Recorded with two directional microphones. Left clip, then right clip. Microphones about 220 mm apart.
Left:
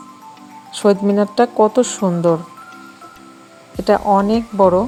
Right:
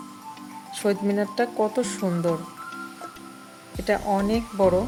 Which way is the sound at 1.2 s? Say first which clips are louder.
Left 10 dB; 20° left (ahead or behind).